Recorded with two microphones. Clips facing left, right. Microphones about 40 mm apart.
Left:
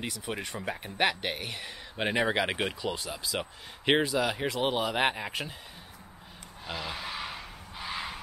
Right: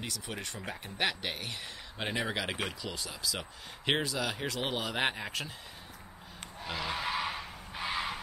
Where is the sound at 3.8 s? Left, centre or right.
Centre.